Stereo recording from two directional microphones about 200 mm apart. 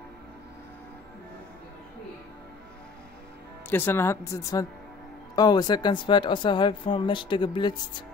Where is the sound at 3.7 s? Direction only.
10° left (ahead or behind).